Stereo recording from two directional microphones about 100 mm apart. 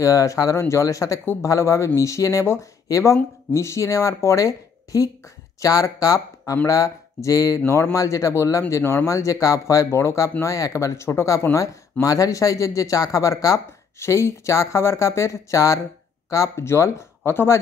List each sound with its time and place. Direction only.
0.0 s speech: 35° left (ahead or behind)
1.2 s speech: 20° left (ahead or behind)